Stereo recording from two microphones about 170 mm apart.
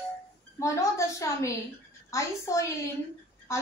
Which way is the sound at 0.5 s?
15° left (ahead or behind).